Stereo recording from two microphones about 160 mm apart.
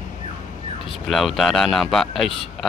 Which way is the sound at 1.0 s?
Centre (ahead or behind).